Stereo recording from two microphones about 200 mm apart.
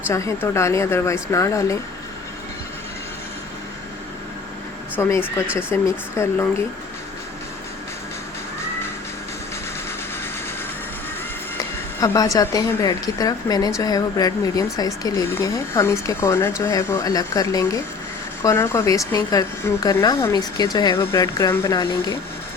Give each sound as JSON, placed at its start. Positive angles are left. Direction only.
{"t": 0.1, "sound": "a woman's voice", "side_deg": 15}
{"t": 4.9, "sound": "a woman's voice", "side_deg": 15}
{"t": 11.9, "sound": "a woman's voice", "side_deg": 20}